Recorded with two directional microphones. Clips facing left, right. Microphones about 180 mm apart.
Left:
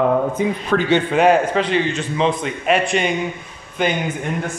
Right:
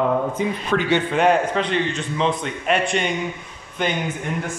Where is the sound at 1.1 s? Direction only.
5° left (ahead or behind).